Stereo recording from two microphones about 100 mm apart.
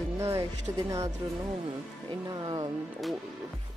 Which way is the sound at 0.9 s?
30° right (ahead or behind).